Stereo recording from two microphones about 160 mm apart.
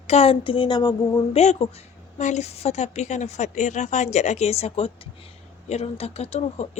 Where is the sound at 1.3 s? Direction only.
40° left (ahead or behind).